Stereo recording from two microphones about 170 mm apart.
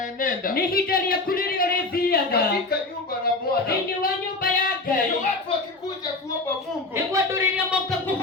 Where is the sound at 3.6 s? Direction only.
55° left (ahead or behind).